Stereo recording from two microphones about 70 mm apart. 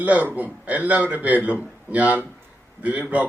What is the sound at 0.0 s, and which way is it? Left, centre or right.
A man's voice, right.